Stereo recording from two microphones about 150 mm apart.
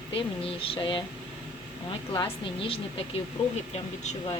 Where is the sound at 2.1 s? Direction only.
35° left (ahead or behind).